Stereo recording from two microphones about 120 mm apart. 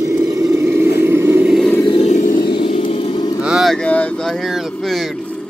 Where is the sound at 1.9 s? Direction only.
65° left (ahead or behind); by 2.3 s 80° left.